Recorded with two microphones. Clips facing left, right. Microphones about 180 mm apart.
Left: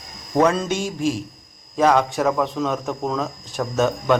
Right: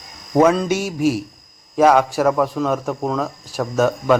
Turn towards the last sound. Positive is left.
turn(degrees=0)  # may be behind; listen again after turning